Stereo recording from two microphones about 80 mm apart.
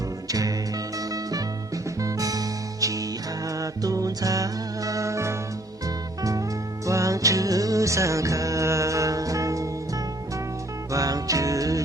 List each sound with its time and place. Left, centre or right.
0.3 s music: right
6.8 s music: right
10.9 s music: right